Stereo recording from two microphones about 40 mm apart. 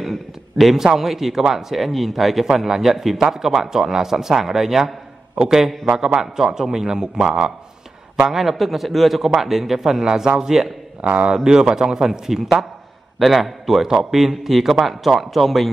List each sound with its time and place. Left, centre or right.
0.0 s a sound: centre
0.9 s a man's voice: centre
5.9 s a man's voice: centre
11.0 s speech: right
11.3 s a man's voice: centre
13.2 s a man's voice: centre